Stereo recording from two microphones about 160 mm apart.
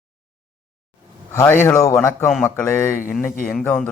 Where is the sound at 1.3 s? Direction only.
15° left (ahead or behind).